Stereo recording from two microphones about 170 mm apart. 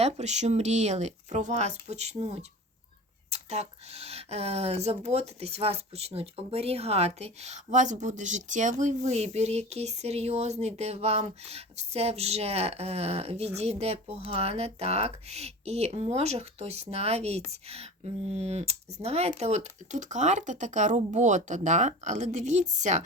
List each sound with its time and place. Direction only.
0.0 s speech: 40° right (ahead or behind)